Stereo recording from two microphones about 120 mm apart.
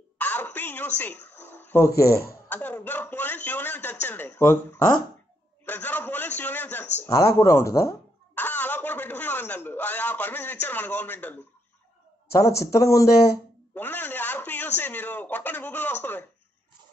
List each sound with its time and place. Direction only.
0.2 s a sound: 15° left (ahead or behind)
2.5 s speech: 15° left (ahead or behind)
7.1 s speech: 25° left (ahead or behind)
12.3 s speech: 25° left (ahead or behind)
13.7 s a sound: 15° left (ahead or behind)
14.8 s speech: 15° left (ahead or behind)